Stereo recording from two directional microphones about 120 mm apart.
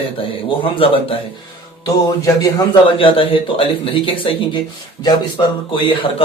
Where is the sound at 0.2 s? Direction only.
50° left (ahead or behind).